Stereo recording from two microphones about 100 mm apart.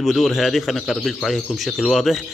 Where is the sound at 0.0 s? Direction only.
Centre (ahead or behind).